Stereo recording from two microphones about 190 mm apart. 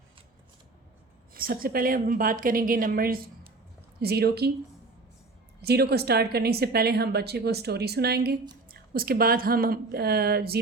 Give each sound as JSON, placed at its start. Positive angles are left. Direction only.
{"t": 1.3, "sound": "a woman's voice", "side_deg": -50}
{"t": 5.6, "sound": "a woman's voice", "side_deg": -55}